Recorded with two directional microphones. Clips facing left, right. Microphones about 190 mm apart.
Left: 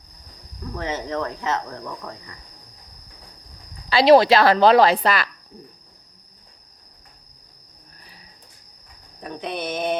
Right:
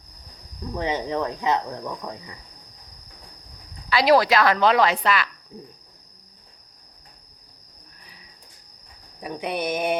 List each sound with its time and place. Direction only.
0.6 s speech: 15° right (ahead or behind)
3.8 s a woman's voice: 25° left (ahead or behind)
9.2 s speech: 10° right (ahead or behind)